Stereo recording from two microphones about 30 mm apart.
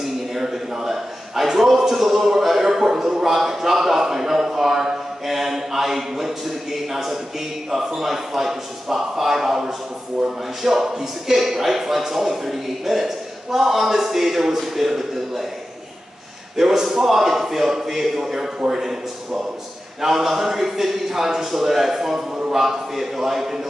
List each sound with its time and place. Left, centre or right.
0.0 s a sound: centre
2.6 s speech: centre
10.6 s speech: centre
16.5 s speech: centre
20.0 s speech: centre